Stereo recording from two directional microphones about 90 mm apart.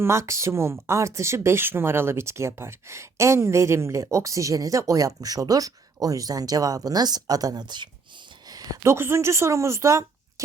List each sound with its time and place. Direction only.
0.0 s a woman's voice: 30° right (ahead or behind)